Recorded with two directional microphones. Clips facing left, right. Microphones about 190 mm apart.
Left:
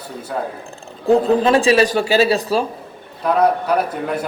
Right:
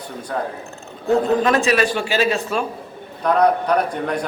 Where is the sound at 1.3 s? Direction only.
30° left (ahead or behind).